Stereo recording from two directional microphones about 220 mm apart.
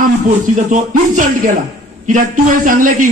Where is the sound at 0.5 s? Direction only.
35° right (ahead or behind).